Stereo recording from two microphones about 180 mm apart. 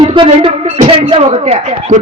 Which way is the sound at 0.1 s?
30° right (ahead or behind).